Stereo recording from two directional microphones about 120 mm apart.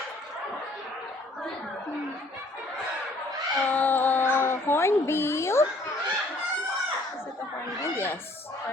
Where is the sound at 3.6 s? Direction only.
15° left (ahead or behind).